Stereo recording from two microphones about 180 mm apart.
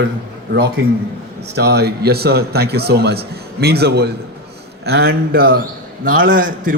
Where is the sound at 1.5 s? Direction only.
65° right (ahead or behind).